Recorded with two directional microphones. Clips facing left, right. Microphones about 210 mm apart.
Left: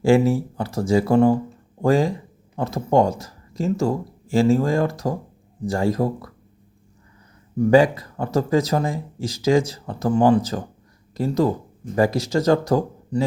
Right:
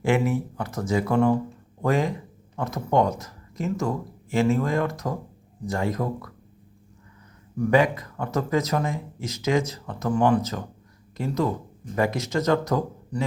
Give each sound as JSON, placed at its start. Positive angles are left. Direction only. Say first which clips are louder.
{"t": 0.0, "sound": "speech", "louder": "left 6 dB", "side_deg": 30}
{"t": 7.5, "sound": "speech", "louder": "left 5 dB", "side_deg": 30}